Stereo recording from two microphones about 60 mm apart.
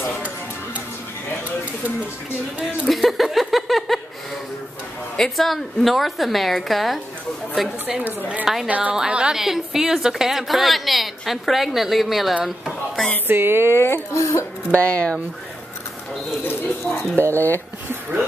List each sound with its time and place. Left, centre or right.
2.9 s a sound: centre
5.1 s a woman's voice: centre
8.6 s a woman's voice: right; by 12.4 s centre
12.4 s a sound: centre
13.3 s speech: right
13.7 s speech: left
14.7 s speech: left
16.4 s speech: left
17.2 s speech: right